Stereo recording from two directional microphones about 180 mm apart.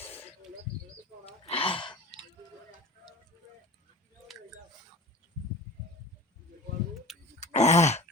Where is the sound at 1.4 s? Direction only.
30° left (ahead or behind).